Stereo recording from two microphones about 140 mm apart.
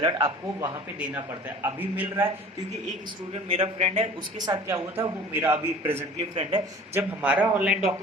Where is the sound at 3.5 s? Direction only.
45° right (ahead or behind).